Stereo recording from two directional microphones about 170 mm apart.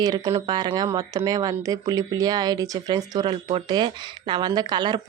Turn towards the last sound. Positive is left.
turn(degrees=-25)  # may be behind; listen again after turning